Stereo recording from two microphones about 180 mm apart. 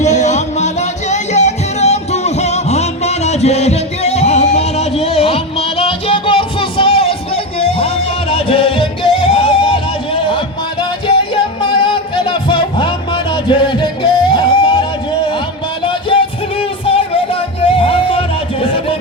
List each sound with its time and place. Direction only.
0.0 s music: 40° left (ahead or behind)